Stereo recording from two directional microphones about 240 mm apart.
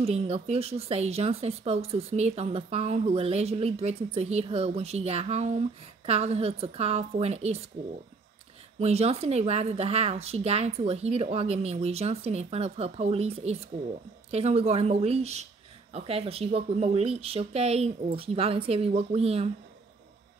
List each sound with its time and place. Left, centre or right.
0.0 s speech: right
8.7 s speech: right